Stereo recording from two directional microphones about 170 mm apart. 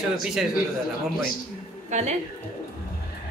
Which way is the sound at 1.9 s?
40° right (ahead or behind).